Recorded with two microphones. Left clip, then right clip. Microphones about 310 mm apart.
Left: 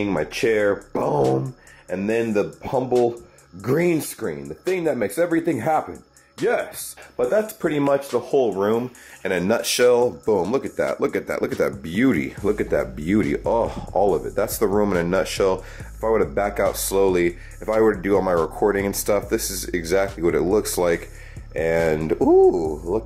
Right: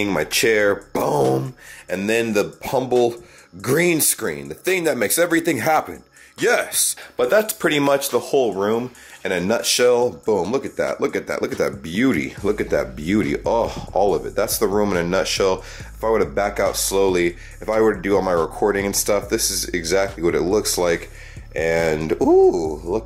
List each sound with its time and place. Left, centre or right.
0.0 s speech: centre
8.3 s speech: left
8.5 s speech: centre